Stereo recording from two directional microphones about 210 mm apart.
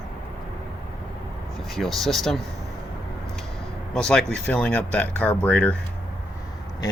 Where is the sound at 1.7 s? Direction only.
Centre (ahead or behind).